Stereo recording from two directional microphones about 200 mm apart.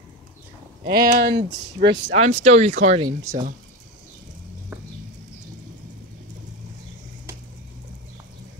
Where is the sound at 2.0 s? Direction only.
35° right (ahead or behind).